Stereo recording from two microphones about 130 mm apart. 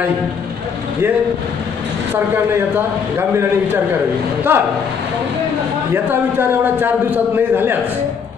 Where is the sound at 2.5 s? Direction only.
20° right (ahead or behind).